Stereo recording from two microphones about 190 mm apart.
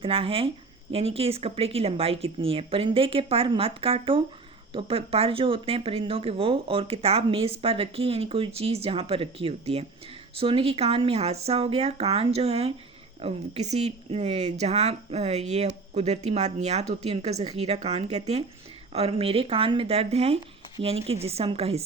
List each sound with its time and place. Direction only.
0.0 s speech: 30° right (ahead or behind)